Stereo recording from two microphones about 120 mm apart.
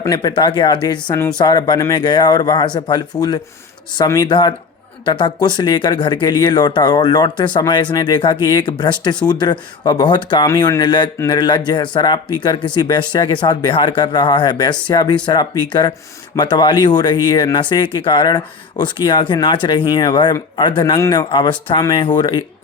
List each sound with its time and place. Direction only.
0.2 s speech: 40° left (ahead or behind)
10.4 s speech: 25° left (ahead or behind); by 22.4 s 40° left (ahead or behind)